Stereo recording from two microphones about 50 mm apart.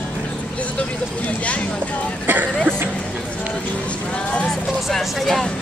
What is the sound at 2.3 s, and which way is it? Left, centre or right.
Speech, right.